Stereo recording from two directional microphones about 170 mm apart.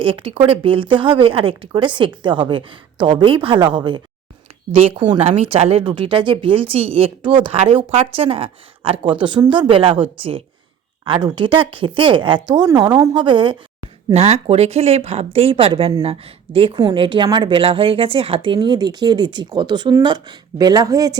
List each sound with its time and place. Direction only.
0.0 s a woman's voice: 30° right (ahead or behind)
11.0 s speech: 30° right (ahead or behind)
14.1 s a woman's voice: 40° right (ahead or behind); by 21.2 s 20° right (ahead or behind)